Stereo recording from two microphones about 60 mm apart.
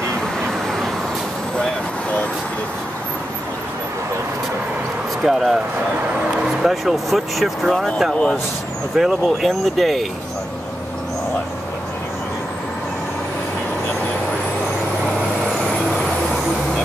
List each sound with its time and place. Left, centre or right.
0.4 s vehicle: centre
5.2 s speech: centre
8.1 s speech: centre
8.9 s speech: centre